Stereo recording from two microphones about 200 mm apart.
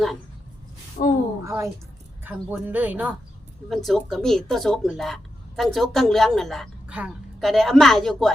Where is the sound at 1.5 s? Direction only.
15° right (ahead or behind).